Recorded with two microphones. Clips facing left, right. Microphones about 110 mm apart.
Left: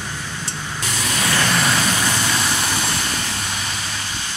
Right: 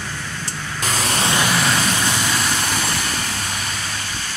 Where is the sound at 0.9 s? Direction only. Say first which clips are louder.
Right 4 dB; 40° right (ahead or behind).